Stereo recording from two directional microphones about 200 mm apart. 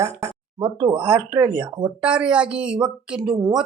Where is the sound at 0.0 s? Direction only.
15° right (ahead or behind).